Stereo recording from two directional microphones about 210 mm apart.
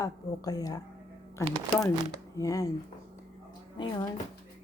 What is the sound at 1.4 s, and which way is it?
Speech, 20° right (ahead or behind).